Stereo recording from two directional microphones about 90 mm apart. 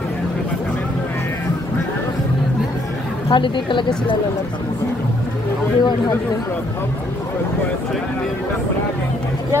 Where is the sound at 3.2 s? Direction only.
65° left (ahead or behind).